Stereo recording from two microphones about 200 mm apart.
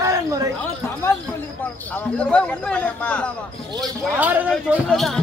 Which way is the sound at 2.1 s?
5° left (ahead or behind).